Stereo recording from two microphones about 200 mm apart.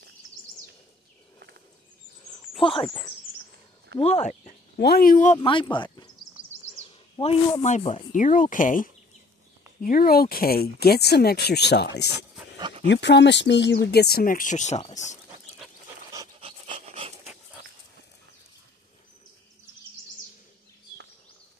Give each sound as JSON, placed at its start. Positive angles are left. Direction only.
{"t": 2.6, "sound": "speech", "side_deg": 25}
{"t": 4.0, "sound": "speech", "side_deg": 35}
{"t": 4.7, "sound": "speech", "side_deg": 50}
{"t": 5.4, "sound": "speech", "side_deg": 25}
{"t": 12.5, "sound": "dog", "side_deg": -25}
{"t": 12.8, "sound": "speech", "side_deg": 60}
{"t": 16.3, "sound": "dog", "side_deg": -25}